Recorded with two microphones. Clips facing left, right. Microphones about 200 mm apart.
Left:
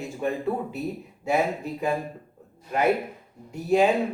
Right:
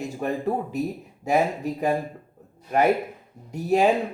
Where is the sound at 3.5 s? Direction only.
40° right (ahead or behind).